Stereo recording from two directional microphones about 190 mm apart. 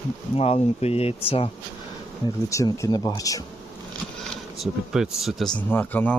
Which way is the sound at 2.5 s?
15° left (ahead or behind).